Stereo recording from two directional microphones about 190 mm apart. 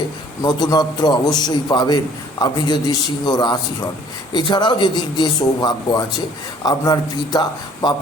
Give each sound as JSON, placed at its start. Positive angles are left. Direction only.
{"t": 0.4, "sound": "a man's voice", "side_deg": 20}